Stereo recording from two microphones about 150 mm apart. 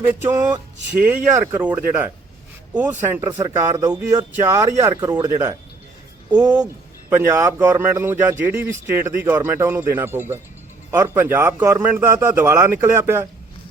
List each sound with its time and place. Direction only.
0.4 s speech: 10° right (ahead or behind)
3.3 s speech: 25° right (ahead or behind)
7.1 s speech: 15° right (ahead or behind)